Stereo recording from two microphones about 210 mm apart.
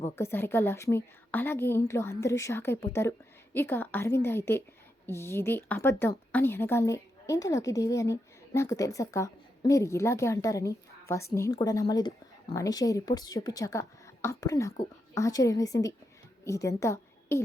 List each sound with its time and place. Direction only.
0.0 s a woman's voice: 10° left (ahead or behind)